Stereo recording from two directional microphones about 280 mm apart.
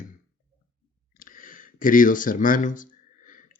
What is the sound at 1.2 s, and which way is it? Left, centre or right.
Speech, left.